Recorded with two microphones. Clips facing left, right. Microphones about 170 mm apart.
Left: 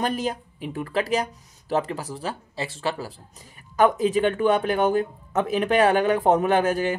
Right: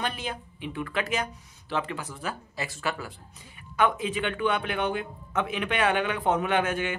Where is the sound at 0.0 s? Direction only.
40° left (ahead or behind).